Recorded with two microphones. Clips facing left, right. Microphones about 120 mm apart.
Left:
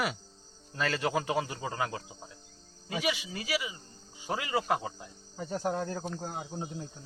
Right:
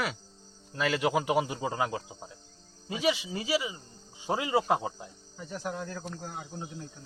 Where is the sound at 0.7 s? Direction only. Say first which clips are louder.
Right 3 dB; 10° right (ahead or behind).